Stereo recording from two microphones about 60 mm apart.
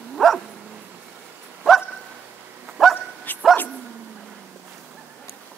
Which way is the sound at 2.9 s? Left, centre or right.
Left.